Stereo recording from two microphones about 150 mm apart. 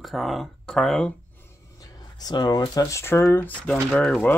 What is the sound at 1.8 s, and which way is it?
Speech, 25° left (ahead or behind).